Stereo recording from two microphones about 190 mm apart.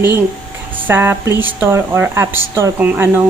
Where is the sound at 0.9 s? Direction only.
10° right (ahead or behind).